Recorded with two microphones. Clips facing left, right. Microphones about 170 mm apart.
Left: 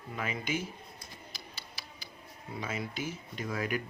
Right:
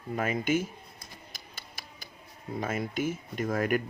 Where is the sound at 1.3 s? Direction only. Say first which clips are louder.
Even; 50° right (ahead or behind).